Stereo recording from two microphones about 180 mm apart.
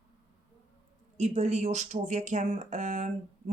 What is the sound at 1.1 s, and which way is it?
Speech, 40° right (ahead or behind).